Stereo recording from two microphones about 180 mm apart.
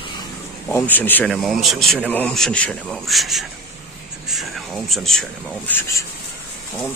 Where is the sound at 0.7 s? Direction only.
10° left (ahead or behind).